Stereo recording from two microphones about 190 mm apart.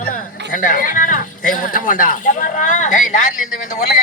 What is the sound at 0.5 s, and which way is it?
Speech, 45° left (ahead or behind).